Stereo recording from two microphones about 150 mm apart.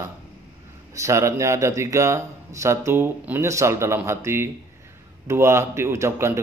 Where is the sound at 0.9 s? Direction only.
20° right (ahead or behind).